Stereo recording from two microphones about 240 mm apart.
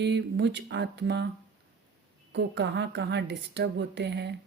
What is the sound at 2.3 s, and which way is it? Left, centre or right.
A woman's voice, right.